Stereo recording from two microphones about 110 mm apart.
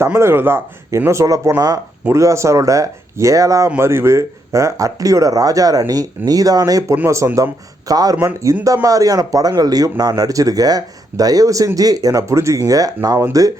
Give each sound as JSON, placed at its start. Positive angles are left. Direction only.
{"t": 0.0, "sound": "speech", "side_deg": -25}
{"t": 6.9, "sound": "speech", "side_deg": -20}
{"t": 7.9, "sound": "speech", "side_deg": -35}